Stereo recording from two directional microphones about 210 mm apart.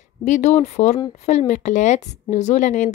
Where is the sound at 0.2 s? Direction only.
35° left (ahead or behind).